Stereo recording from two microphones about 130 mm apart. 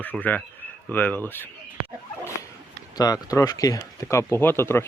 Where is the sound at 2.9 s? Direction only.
30° left (ahead or behind).